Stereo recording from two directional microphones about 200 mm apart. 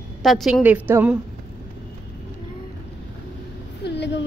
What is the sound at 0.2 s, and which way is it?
Speech, centre (ahead or behind).